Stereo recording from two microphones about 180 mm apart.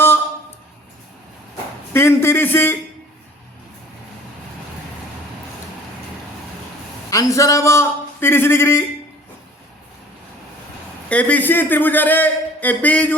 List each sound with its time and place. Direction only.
1.9 s a man's voice: 15° left (ahead or behind)
7.1 s a man's voice: 20° left (ahead or behind)
11.1 s a man's voice: 5° left (ahead or behind)